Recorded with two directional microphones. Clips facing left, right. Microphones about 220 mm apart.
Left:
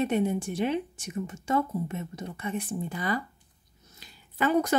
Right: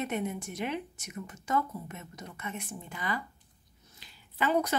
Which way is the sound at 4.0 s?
45° left (ahead or behind).